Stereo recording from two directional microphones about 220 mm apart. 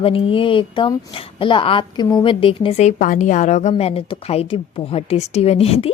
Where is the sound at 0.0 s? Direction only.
25° left (ahead or behind).